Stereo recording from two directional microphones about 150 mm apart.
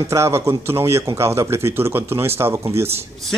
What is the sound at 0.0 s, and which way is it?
A man's voice, 20° right (ahead or behind).